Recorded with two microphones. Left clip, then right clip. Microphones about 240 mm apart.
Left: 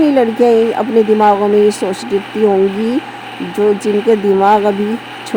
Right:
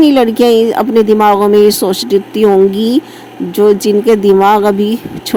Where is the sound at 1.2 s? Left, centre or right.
Right.